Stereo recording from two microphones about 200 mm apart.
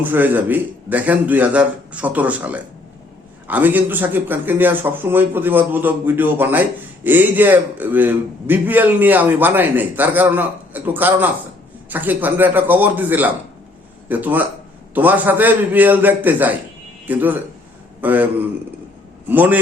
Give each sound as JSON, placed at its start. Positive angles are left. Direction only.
{"t": 0.0, "sound": "a man's voice", "side_deg": -10}
{"t": 19.3, "sound": "a man's voice", "side_deg": -10}